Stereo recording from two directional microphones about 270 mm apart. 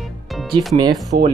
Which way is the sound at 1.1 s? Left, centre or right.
Right.